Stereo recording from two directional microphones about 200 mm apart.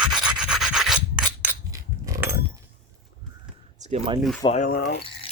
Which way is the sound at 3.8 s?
30° right (ahead or behind).